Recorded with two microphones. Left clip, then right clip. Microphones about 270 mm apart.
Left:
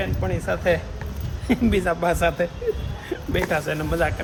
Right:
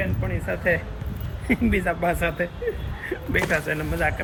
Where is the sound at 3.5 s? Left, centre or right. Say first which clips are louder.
Left 1 dB; centre.